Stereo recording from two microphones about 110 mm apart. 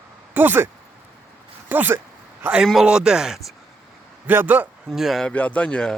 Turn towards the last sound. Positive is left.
turn(degrees=10)  # may be behind; listen again after turning